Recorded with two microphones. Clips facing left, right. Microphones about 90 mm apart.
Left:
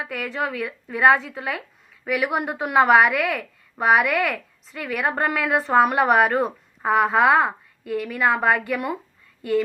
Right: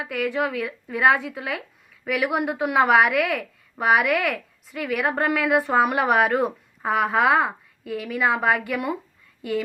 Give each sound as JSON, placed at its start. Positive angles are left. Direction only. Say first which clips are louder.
{"t": 0.3, "sound": "a woman's voice", "louder": "right 1 dB", "side_deg": -10}